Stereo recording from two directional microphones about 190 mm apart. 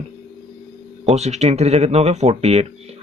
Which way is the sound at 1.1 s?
35° right (ahead or behind).